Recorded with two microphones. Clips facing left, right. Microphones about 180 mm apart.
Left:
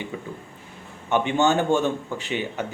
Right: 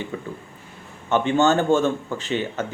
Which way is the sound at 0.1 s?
10° left (ahead or behind).